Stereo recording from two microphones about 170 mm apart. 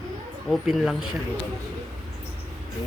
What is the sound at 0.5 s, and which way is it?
Speech, centre (ahead or behind).